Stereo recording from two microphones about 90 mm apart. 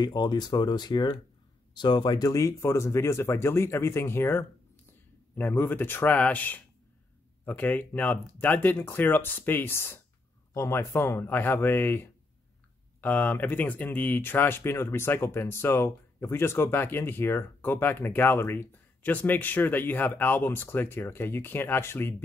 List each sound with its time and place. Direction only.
0.0 s speech: 50° left (ahead or behind); by 22.1 s 25° left (ahead or behind)